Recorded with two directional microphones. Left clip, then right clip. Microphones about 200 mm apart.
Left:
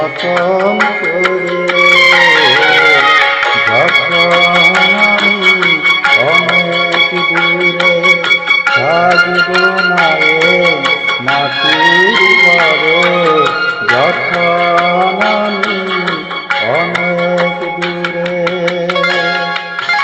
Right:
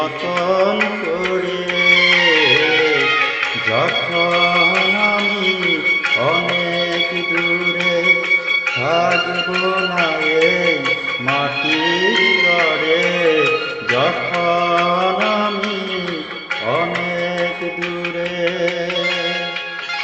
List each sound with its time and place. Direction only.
1.9 s music of bollywood: 55° left (ahead or behind)
10.3 s music: 55° left (ahead or behind)